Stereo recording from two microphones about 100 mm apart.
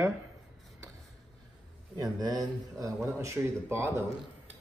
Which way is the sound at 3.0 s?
25° right (ahead or behind).